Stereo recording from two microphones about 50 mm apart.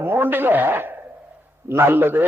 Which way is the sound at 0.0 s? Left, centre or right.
Right.